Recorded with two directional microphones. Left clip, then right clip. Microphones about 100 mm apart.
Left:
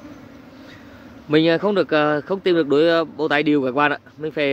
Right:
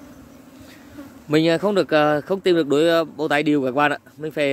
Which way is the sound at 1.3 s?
55° right (ahead or behind).